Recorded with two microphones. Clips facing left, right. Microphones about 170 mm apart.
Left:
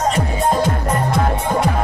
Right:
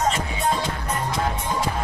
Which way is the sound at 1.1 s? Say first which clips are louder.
Left 7 dB; 65° left (ahead or behind).